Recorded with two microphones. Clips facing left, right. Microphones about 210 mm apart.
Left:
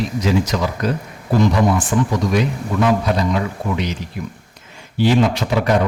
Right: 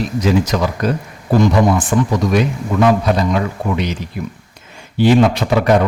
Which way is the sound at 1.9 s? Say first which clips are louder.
Right 3 dB; 55° right (ahead or behind).